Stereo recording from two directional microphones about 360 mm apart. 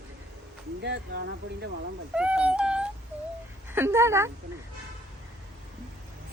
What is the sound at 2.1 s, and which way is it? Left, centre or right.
Speech, centre.